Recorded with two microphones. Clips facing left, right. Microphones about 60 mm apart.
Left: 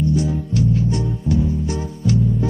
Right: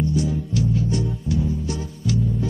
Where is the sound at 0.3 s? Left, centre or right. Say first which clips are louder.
Left 3 dB; left.